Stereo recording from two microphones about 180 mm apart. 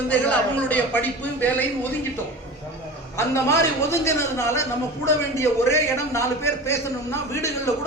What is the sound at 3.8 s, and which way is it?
A man's voice, 15° left (ahead or behind).